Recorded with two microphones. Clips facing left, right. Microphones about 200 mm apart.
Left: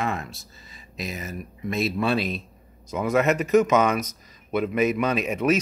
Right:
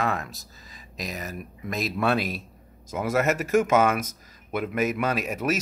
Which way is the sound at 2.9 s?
5° right (ahead or behind).